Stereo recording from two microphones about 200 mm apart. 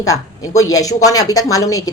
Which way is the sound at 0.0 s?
15° left (ahead or behind).